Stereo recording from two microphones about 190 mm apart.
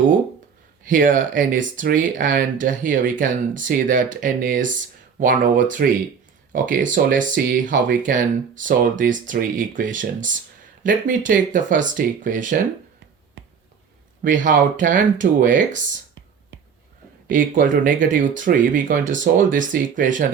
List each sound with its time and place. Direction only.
0.9 s speech: 45° right (ahead or behind)
14.3 s speech: 45° right (ahead or behind)
17.2 s speech: 45° right (ahead or behind)